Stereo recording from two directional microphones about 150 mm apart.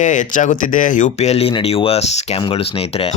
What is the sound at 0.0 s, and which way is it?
Speech, 55° left (ahead or behind).